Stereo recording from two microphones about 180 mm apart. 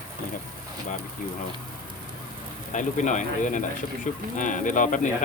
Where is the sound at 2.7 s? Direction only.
45° left (ahead or behind).